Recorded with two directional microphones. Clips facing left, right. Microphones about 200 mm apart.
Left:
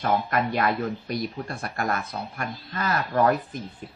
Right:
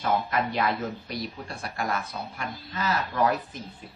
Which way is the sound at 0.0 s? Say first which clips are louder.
Left 2 dB; 55° left (ahead or behind).